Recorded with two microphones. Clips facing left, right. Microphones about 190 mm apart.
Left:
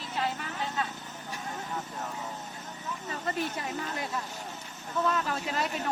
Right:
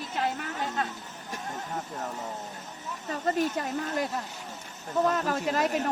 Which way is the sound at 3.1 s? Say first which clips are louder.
Right 6 dB; 45° right (ahead or behind).